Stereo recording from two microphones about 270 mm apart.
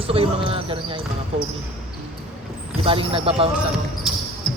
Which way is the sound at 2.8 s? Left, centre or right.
Centre.